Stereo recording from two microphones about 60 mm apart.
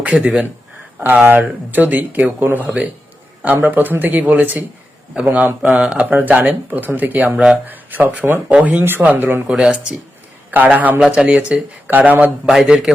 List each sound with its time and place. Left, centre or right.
0.3 s speech: right
5.2 s speech: centre
9.5 s speech: centre
10.5 s speech: right
11.0 s speech: centre
12.6 s speech: centre